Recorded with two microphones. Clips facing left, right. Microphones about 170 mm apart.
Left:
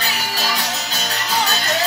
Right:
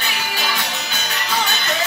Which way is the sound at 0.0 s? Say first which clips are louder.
Left 1 dB; 40° left (ahead or behind).